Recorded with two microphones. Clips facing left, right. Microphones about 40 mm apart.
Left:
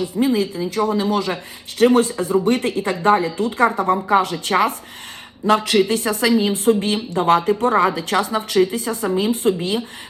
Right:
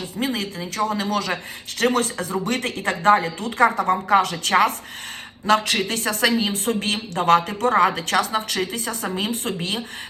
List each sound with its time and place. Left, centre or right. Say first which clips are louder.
0.0 s a woman's voice: left 7 dB; right